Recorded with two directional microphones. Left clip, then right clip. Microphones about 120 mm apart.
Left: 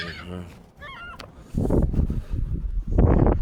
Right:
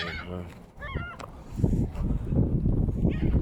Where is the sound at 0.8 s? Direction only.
10° right (ahead or behind).